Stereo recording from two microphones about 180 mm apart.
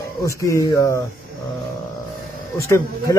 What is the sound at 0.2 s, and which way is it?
Speech, 15° left (ahead or behind).